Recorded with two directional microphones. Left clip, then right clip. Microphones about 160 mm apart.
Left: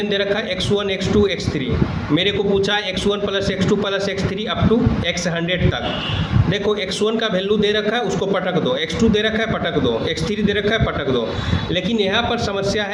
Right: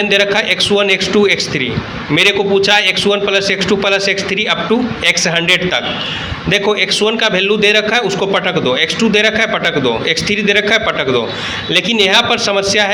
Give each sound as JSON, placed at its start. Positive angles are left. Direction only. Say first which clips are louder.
{"t": 0.1, "sound": "a man's voice", "louder": "right 8 dB", "side_deg": -20}